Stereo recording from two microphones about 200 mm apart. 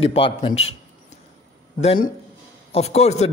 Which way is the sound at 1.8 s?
35° left (ahead or behind).